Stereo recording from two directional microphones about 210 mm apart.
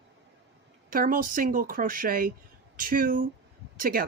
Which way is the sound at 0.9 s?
40° right (ahead or behind).